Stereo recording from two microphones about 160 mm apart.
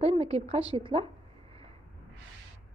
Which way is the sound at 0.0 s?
40° right (ahead or behind).